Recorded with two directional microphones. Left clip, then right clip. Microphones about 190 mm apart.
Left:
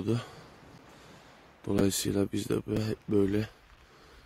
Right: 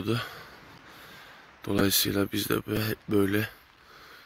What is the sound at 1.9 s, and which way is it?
Speech, 15° left (ahead or behind).